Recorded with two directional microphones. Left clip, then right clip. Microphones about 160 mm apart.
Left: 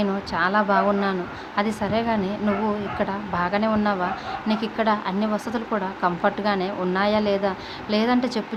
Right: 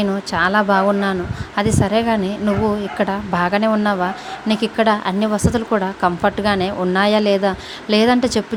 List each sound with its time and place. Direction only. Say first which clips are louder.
0.0 s a woman's voice: right 5 dB; 45° right (ahead or behind)